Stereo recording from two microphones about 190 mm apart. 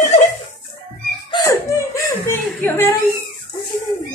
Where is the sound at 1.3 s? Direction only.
15° left (ahead or behind).